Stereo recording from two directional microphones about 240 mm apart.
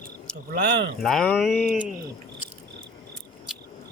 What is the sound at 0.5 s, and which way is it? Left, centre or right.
Speech, right.